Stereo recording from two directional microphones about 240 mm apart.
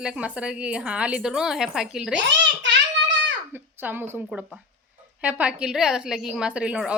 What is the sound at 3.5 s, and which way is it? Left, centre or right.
A woman's voice, centre.